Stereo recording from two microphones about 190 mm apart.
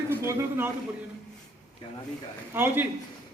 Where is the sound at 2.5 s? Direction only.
10° right (ahead or behind).